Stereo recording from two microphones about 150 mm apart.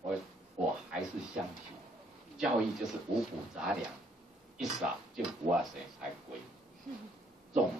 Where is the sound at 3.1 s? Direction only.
5° right (ahead or behind).